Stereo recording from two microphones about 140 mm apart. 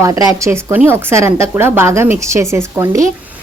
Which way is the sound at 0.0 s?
25° right (ahead or behind).